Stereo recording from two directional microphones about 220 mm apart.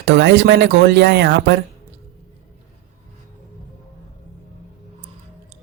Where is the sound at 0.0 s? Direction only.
55° right (ahead or behind).